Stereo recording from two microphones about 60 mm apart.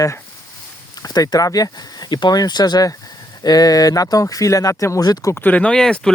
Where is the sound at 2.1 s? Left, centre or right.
Left.